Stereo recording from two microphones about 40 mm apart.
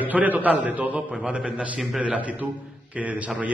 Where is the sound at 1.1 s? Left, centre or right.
Right.